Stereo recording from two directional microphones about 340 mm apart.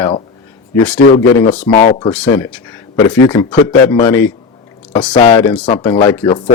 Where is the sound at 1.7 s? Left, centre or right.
Centre.